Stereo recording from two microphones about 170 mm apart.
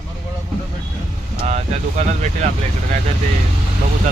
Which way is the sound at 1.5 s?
45° right (ahead or behind).